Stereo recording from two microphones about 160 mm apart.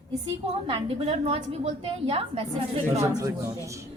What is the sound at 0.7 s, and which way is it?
A woman's voice, 35° right (ahead or behind).